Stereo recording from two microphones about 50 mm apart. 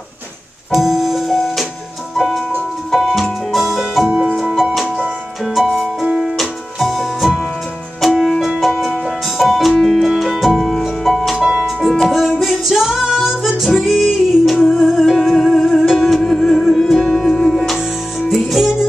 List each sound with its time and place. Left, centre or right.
0.7 s music: centre
4.1 s music: right
5.4 s music: centre
11.3 s music: centre